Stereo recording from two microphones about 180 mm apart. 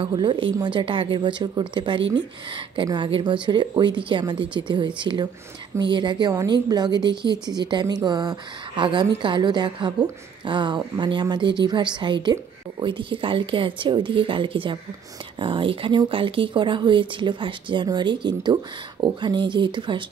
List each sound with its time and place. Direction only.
0.0 s a woman's voice: 25° right (ahead or behind)